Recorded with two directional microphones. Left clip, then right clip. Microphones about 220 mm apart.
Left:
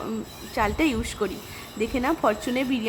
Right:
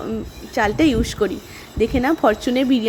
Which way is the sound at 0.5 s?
15° right (ahead or behind).